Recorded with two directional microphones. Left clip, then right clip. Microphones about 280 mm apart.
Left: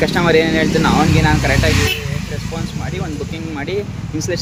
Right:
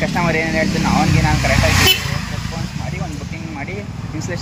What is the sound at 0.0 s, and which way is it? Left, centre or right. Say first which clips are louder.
Speech: left 5 dB; centre.